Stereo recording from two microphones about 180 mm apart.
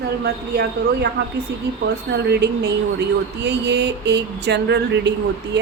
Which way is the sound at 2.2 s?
65° right (ahead or behind).